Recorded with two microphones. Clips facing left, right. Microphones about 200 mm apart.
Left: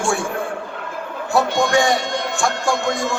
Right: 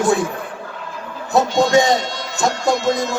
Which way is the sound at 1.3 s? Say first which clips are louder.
Right 3 dB; 20° right (ahead or behind).